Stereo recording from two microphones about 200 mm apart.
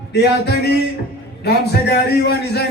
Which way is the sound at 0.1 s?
55° left (ahead or behind).